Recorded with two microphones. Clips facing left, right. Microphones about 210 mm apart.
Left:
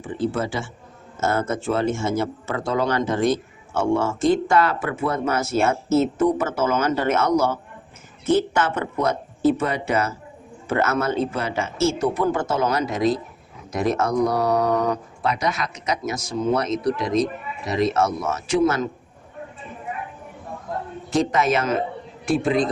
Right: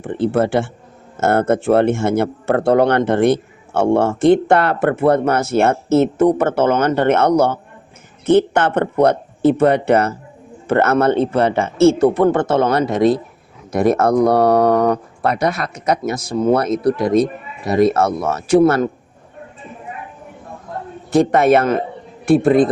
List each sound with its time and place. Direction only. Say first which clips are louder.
0.0 s speech: right 7 dB; 60° right (ahead or behind)
21.1 s speech: right 8 dB; 60° right (ahead or behind)